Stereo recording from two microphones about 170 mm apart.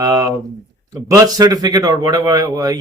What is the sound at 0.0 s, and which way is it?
Speech, 20° right (ahead or behind).